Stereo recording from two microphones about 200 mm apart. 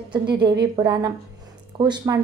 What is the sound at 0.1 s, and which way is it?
A woman's voice, 25° right (ahead or behind).